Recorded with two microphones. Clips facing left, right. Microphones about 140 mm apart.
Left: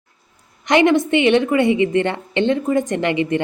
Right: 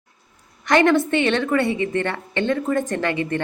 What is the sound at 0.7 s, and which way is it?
A woman's voice, 15° left (ahead or behind).